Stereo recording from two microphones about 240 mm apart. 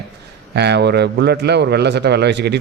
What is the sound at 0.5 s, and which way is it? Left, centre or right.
A man's voice, right.